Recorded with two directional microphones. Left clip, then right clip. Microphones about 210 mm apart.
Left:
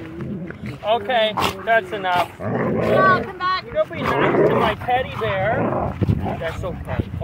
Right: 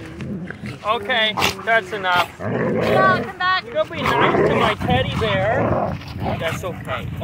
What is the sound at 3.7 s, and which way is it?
Speech, centre (ahead or behind).